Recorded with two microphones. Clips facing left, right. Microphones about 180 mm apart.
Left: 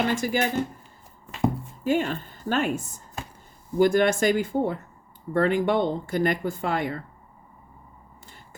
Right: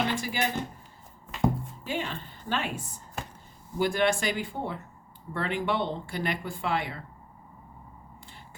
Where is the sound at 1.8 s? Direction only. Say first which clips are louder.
Left 11 dB; 45° left (ahead or behind).